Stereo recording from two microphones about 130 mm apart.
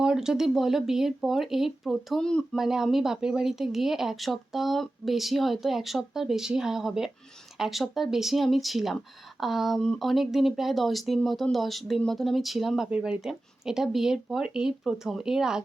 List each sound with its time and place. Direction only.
0.0 s speech: 5° right (ahead or behind)